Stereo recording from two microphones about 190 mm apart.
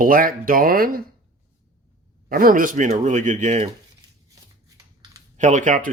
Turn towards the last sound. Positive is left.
turn(degrees=-40)  # may be behind; listen again after turning